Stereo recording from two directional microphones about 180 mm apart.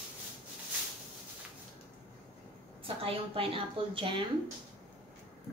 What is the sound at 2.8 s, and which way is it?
A woman's voice, 30° right (ahead or behind).